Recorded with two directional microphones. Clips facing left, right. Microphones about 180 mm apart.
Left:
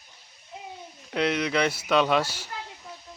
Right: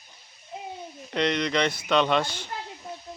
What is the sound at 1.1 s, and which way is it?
Speech, 5° left (ahead or behind).